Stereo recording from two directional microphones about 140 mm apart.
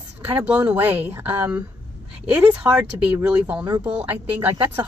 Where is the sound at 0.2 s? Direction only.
15° right (ahead or behind).